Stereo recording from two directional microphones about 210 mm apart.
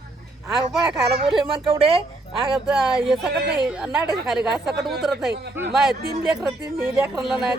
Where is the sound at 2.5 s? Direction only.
5° right (ahead or behind).